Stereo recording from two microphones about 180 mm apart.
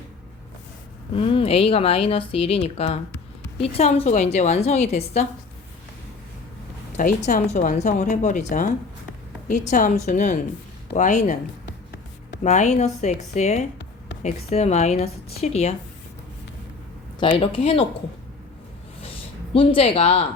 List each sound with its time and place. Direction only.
1.1 s speech: 30° left (ahead or behind)
6.9 s speech: 45° left (ahead or behind)
12.4 s speech: 40° left (ahead or behind)
17.2 s speech: 30° left (ahead or behind)
18.9 s a sound: 30° left (ahead or behind)